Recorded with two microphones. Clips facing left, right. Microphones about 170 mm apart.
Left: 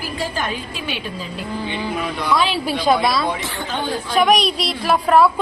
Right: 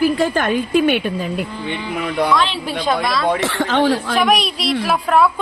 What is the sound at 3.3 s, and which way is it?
Speech, 85° right.